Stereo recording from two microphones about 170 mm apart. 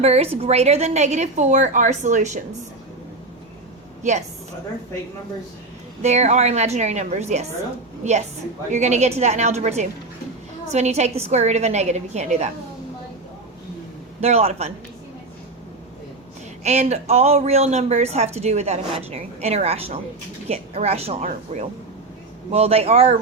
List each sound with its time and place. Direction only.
0.0 s a woman's voice: 35° right (ahead or behind)
6.0 s speech: 40° right (ahead or behind)
8.7 s speech: 40° right (ahead or behind)
14.2 s speech: 40° right (ahead or behind)
16.6 s speech: 40° right (ahead or behind)